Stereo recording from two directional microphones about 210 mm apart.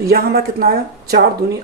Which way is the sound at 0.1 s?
45° right (ahead or behind).